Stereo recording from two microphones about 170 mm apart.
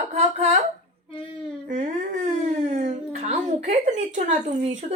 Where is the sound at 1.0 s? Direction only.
30° left (ahead or behind).